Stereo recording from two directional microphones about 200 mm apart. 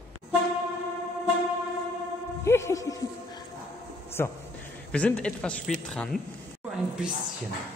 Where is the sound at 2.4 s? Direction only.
15° left (ahead or behind).